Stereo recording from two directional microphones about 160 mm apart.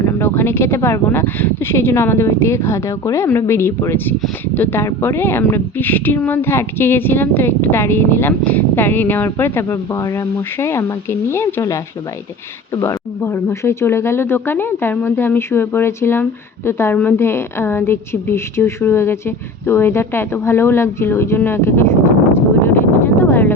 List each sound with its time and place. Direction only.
0.2 s speech: 15° left (ahead or behind)